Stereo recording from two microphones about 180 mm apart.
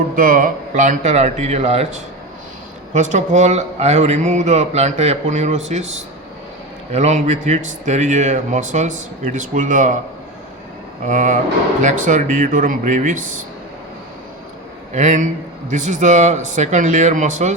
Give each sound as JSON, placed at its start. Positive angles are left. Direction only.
{"t": 0.2, "sound": "speech", "side_deg": -50}
{"t": 2.9, "sound": "speech", "side_deg": -45}
{"t": 11.0, "sound": "speech", "side_deg": -45}
{"t": 14.9, "sound": "speech", "side_deg": -40}